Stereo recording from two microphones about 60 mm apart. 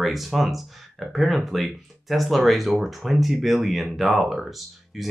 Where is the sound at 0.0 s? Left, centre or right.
Centre.